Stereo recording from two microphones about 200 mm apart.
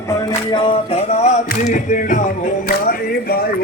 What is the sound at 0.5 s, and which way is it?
Music, 25° left (ahead or behind).